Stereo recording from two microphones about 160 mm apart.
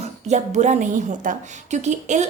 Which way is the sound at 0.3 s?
45° right (ahead or behind).